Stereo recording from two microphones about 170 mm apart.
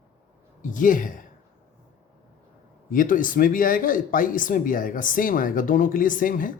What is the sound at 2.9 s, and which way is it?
Speech, 55° left (ahead or behind).